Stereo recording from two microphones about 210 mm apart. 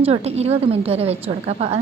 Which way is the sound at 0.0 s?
30° right (ahead or behind).